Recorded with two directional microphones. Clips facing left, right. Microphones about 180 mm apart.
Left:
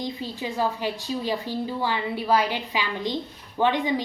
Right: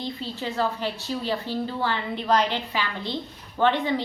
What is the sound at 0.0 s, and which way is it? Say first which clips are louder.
A woman's voice: left 1 dB; 15° left (ahead or behind).